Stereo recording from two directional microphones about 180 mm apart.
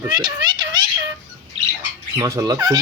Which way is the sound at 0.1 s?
25° right (ahead or behind).